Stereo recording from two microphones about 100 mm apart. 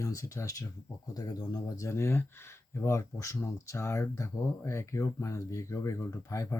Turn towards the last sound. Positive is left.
turn(degrees=30)  # may be behind; listen again after turning